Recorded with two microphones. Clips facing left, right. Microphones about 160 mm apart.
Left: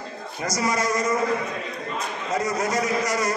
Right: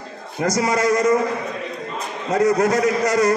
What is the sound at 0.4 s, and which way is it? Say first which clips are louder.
Speech: right 6 dB; 65° right (ahead or behind).